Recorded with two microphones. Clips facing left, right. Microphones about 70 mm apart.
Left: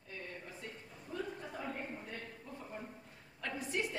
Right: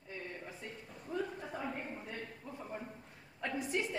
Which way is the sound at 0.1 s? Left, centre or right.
Centre.